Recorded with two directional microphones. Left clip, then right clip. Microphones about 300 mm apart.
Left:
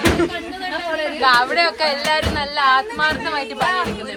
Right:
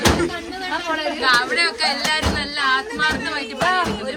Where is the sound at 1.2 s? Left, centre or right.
Centre.